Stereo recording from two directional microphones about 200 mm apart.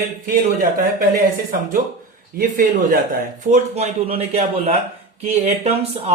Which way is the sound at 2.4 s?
45° right (ahead or behind).